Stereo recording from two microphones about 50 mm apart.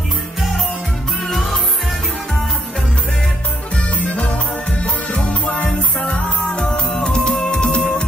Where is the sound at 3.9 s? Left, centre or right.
Left.